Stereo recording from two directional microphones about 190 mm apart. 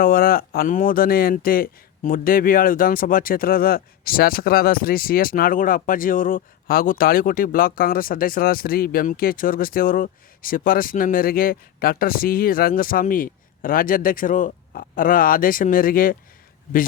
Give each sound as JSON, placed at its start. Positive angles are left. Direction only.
{"t": 0.0, "sound": "speech", "side_deg": 50}